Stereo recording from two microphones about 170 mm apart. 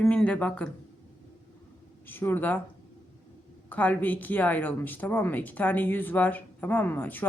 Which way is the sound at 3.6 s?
10° left (ahead or behind).